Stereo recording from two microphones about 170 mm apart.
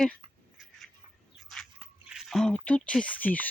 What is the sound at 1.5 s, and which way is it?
Dog, centre (ahead or behind).